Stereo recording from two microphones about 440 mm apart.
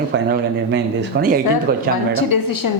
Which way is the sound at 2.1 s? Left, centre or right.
Left.